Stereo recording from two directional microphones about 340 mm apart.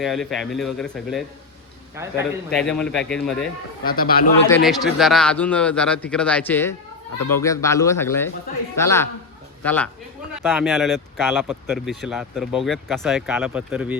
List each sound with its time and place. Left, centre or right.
0.0 s speech: centre
3.8 s a man's voice: left
4.4 s speech: centre